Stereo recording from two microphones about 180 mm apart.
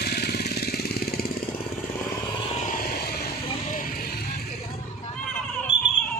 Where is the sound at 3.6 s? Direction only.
50° left (ahead or behind).